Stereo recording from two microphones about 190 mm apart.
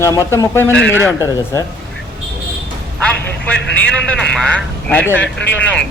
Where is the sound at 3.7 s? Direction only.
5° left (ahead or behind).